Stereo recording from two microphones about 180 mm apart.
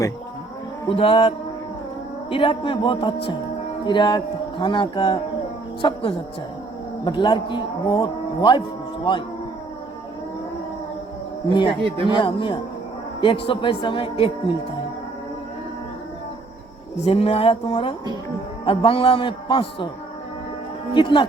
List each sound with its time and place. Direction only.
0.9 s speech: 30° left (ahead or behind)
2.3 s speech: 30° left (ahead or behind)
11.8 s speech: 30° right (ahead or behind)
12.0 s speech: 25° left (ahead or behind)
17.0 s speech: 30° left (ahead or behind)
20.9 s speech: 25° left (ahead or behind)